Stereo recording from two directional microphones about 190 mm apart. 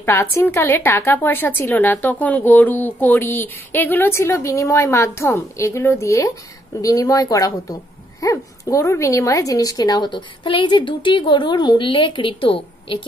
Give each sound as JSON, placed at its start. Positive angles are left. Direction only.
{"t": 0.0, "sound": "a woman's voice", "side_deg": 15}